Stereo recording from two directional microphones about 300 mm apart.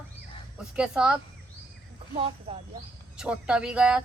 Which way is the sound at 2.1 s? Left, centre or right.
Centre.